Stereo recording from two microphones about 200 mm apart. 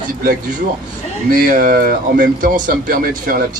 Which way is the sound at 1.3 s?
45° right (ahead or behind).